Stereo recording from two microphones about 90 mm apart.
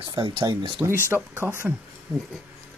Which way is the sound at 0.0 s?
70° right (ahead or behind).